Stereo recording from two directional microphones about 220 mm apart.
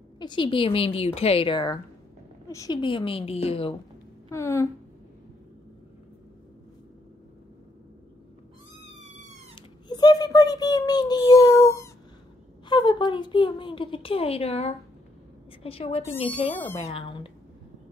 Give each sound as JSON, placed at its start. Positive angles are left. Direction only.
{"t": 0.2, "sound": "a woman's voice", "side_deg": 20}
{"t": 4.3, "sound": "speech", "side_deg": 10}
{"t": 9.6, "sound": "a woman's voice", "side_deg": 20}